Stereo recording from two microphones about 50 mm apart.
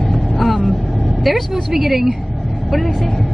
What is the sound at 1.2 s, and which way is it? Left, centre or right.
A woman's voice, centre.